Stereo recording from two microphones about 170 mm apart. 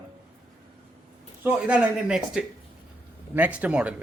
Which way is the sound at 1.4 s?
5° right (ahead or behind).